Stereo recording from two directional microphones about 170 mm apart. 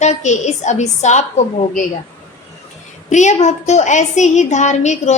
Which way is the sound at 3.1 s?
45° left (ahead or behind).